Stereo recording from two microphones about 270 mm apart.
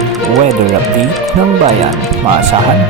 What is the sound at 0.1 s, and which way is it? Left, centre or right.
Music, centre.